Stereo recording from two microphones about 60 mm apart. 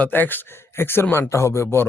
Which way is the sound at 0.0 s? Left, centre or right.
Left.